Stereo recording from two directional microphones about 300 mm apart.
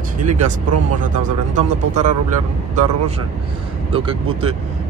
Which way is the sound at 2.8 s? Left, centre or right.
Right.